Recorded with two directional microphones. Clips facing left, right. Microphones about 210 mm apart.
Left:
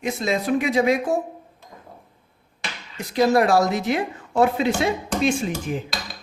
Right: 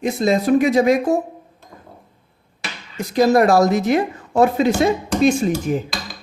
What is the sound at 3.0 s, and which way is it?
Speech, 45° right (ahead or behind).